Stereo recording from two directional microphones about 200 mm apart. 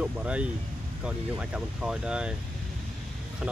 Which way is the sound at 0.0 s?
5° right (ahead or behind).